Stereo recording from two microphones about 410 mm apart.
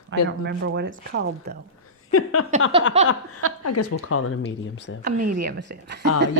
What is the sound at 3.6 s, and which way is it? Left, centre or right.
Speech, left.